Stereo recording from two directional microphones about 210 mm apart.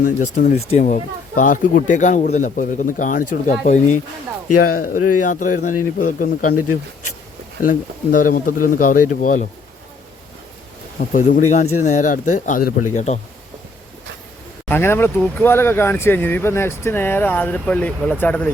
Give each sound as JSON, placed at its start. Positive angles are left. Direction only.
{"t": 0.0, "sound": "a man's voice", "side_deg": 40}
{"t": 7.6, "sound": "a man's voice", "side_deg": 40}
{"t": 11.1, "sound": "a man's voice", "side_deg": 40}
{"t": 14.7, "sound": "speech", "side_deg": 10}